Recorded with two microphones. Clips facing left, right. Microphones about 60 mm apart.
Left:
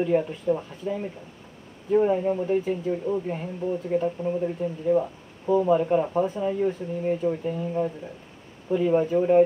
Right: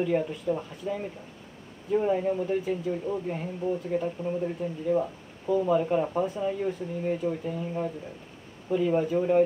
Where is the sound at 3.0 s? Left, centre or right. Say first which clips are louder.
Left 3 dB; centre.